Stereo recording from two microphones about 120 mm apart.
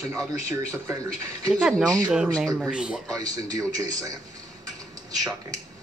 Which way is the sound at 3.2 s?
30° right (ahead or behind).